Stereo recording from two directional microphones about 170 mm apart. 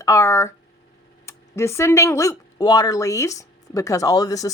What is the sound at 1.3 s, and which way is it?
Speech, 15° left (ahead or behind).